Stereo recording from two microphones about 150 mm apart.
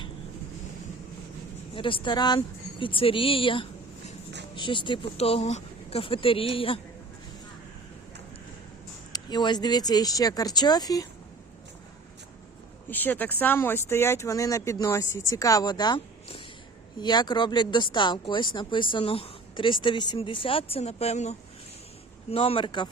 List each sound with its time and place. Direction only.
1.7 s speech: 35° left (ahead or behind)
9.1 s speech: 30° left (ahead or behind)
12.9 s speech: 10° left (ahead or behind); by 22.9 s 30° left (ahead or behind)